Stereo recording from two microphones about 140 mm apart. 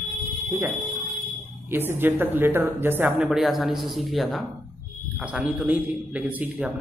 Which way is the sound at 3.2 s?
5° right (ahead or behind).